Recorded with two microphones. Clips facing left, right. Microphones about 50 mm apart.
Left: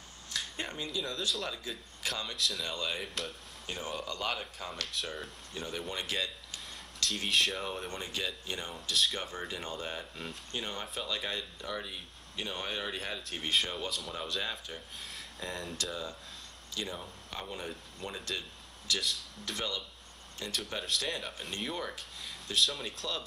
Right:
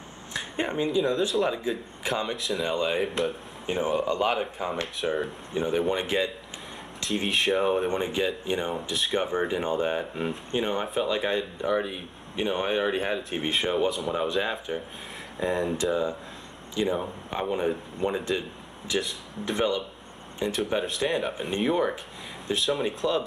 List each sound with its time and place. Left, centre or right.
0.3 s speech: right